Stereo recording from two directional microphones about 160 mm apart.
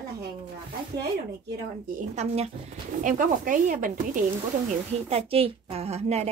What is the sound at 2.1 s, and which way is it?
Speech, 40° right (ahead or behind).